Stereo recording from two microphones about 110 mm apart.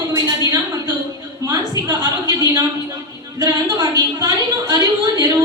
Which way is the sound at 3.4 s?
40° right (ahead or behind).